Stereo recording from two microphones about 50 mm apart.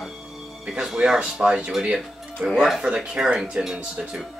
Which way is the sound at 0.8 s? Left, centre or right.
Centre.